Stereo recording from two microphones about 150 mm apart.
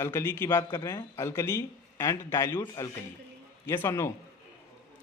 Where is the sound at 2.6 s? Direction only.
25° left (ahead or behind).